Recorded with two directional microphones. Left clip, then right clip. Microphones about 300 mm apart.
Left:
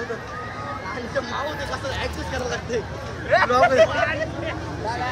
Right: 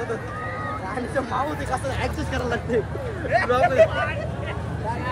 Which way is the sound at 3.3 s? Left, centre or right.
Centre.